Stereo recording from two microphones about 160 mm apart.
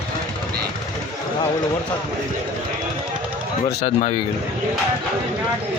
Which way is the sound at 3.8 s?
45° left (ahead or behind).